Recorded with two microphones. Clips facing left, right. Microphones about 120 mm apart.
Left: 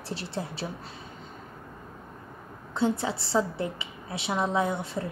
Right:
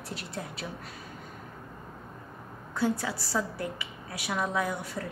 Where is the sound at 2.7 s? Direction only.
25° left (ahead or behind).